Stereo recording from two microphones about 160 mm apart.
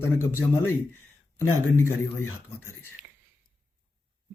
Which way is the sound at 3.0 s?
10° right (ahead or behind).